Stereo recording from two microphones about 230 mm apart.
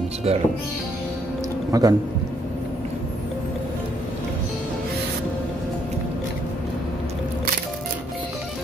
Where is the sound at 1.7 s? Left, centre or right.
Centre.